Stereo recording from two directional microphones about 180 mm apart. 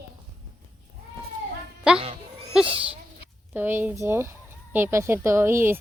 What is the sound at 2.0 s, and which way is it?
Bleat, 35° right (ahead or behind).